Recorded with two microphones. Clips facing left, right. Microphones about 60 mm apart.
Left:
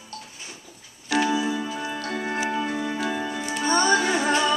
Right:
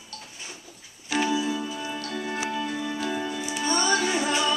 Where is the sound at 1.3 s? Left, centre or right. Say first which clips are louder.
Left 2 dB; left.